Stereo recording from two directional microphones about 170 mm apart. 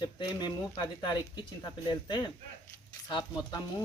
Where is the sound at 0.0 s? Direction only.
25° left (ahead or behind).